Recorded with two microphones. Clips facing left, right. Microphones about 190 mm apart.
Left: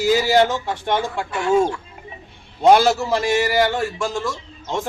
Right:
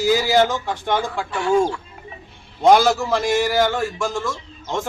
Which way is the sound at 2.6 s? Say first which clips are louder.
Even; 5° left (ahead or behind).